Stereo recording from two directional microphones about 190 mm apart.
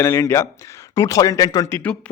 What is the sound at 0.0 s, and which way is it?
Speech, 15° left (ahead or behind).